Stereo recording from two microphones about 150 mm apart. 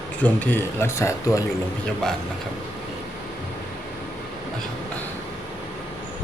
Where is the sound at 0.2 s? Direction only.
10° left (ahead or behind).